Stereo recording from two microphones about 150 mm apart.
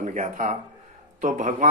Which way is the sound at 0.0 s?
55° right (ahead or behind).